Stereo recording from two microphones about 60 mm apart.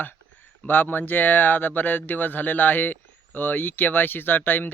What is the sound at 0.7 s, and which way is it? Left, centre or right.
Speech, left.